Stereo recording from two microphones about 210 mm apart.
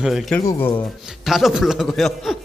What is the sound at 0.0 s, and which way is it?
Speech, centre (ahead or behind).